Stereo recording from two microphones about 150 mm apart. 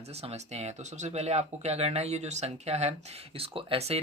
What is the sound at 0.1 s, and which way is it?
Speech, 45° right (ahead or behind).